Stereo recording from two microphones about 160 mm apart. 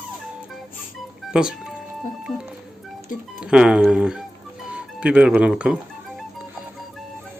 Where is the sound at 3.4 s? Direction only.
5° right (ahead or behind).